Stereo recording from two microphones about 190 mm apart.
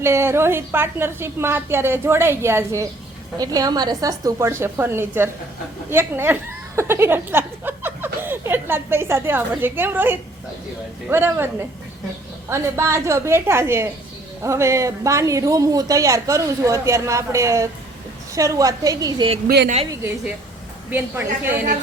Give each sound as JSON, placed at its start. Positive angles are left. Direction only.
{"t": 0.0, "sound": "a woman's voice", "side_deg": -15}
{"t": 12.5, "sound": "a woman's voice", "side_deg": -15}
{"t": 19.5, "sound": "speech", "side_deg": -55}